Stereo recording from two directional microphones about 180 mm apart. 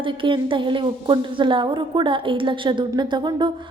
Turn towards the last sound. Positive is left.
turn(degrees=-25)  # may be behind; listen again after turning